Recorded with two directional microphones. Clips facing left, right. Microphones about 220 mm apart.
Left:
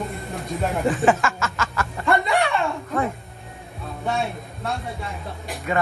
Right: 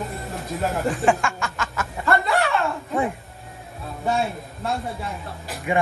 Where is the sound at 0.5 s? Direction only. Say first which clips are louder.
Left 2 dB; centre (ahead or behind).